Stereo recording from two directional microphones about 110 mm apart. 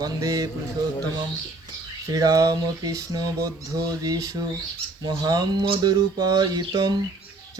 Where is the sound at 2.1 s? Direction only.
35° right (ahead or behind).